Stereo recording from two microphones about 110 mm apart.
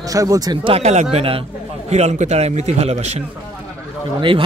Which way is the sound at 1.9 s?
90° right.